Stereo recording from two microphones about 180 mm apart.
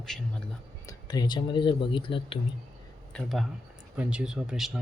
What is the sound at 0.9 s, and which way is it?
Speech, 20° left (ahead or behind).